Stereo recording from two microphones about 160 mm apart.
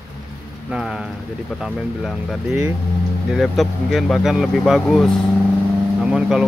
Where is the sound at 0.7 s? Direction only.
5° right (ahead or behind).